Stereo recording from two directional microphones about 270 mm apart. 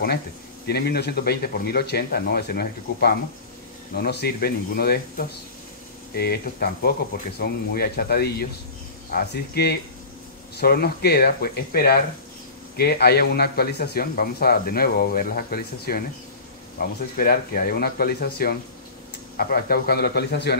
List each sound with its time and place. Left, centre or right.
0.7 s speech: left
17.2 s speech: left